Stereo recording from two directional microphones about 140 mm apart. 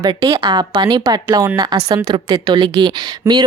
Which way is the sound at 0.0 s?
25° right (ahead or behind).